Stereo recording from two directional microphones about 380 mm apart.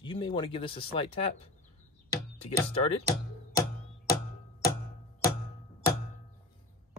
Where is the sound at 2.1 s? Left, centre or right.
Centre.